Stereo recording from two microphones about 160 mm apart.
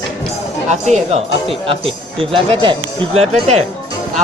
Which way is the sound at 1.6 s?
35° right (ahead or behind).